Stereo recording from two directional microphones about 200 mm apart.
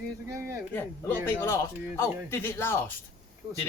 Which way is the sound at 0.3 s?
15° right (ahead or behind).